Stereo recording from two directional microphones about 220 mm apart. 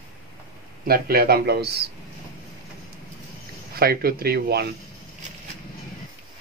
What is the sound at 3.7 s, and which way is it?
Speech, 45° right (ahead or behind).